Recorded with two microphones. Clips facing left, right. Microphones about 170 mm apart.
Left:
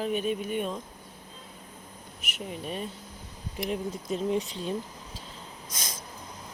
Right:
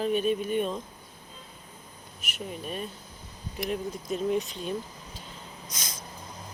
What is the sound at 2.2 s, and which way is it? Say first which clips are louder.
Speech: even; 20° left (ahead or behind).